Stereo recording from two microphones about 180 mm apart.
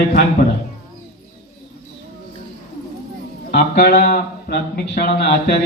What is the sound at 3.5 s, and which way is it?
Speech, 55° left (ahead or behind).